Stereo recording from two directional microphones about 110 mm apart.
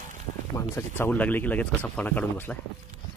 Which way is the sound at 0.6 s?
20° left (ahead or behind).